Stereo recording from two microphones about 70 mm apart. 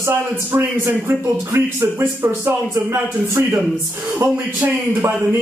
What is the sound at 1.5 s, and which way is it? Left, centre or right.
Speech, right.